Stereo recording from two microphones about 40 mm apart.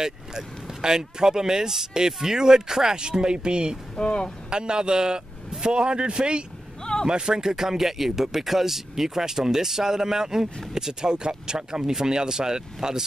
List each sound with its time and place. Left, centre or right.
0.0 s speech: centre
3.9 s speech: left
4.5 s a man's voice: right
6.8 s vehicle: centre
7.1 s speech: right